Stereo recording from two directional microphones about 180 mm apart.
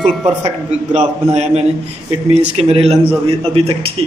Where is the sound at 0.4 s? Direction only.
35° right (ahead or behind).